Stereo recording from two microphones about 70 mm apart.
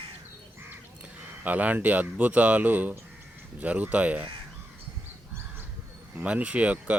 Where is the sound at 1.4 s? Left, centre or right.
Right.